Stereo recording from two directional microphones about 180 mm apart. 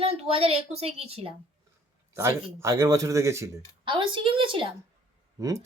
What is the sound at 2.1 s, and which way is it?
Speech, 15° right (ahead or behind).